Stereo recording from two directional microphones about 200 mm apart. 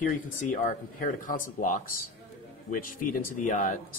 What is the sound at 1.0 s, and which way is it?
Speech, 40° left (ahead or behind).